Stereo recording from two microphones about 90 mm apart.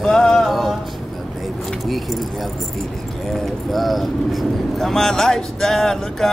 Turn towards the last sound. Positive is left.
turn(degrees=5)  # may be behind; listen again after turning